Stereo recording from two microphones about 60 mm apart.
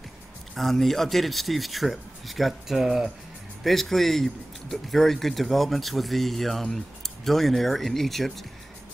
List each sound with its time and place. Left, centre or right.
0.6 s speech: centre